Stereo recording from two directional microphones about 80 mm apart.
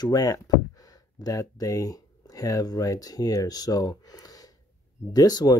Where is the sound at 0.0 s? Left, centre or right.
Left.